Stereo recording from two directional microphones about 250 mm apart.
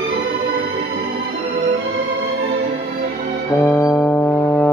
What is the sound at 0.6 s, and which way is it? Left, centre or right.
Music, right.